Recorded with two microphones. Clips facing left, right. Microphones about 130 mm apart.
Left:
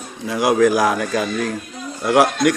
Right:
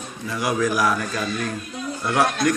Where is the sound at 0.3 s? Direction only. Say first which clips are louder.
Left 7 dB; 90° left.